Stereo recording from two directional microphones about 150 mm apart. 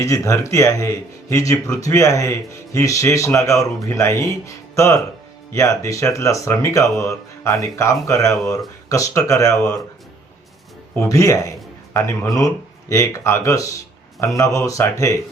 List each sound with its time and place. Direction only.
0.0 s speech: 20° left (ahead or behind)
10.9 s speech: 20° left (ahead or behind)